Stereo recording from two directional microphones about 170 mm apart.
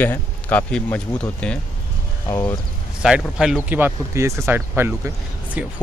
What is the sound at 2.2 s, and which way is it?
Speech, 15° left (ahead or behind).